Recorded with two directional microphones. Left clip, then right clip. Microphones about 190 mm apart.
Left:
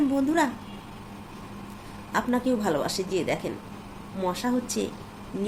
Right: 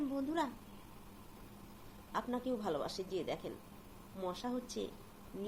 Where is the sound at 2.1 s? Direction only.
15° left (ahead or behind).